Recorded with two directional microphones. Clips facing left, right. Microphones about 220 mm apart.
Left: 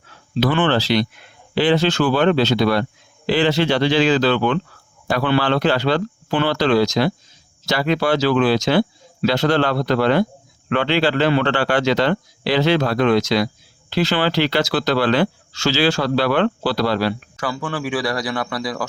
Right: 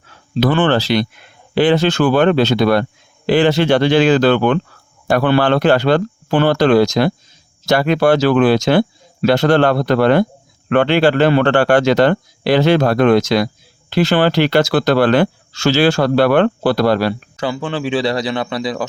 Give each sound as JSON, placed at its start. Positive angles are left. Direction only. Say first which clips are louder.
{"t": 0.3, "sound": "speech", "louder": "right 3 dB", "side_deg": -50}
{"t": 17.3, "sound": "speech", "louder": "right 4 dB", "side_deg": -25}